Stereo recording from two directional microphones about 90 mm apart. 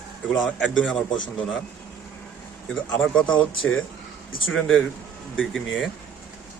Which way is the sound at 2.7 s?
10° left (ahead or behind).